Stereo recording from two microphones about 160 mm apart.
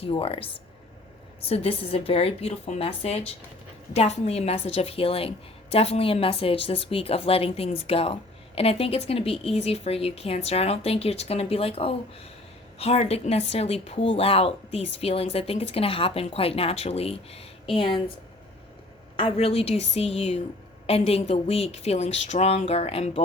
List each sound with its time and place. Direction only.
0.0 s a woman's voice: 35° left (ahead or behind)
1.5 s a woman's voice: 40° left (ahead or behind)
19.2 s a woman's voice: 35° left (ahead or behind)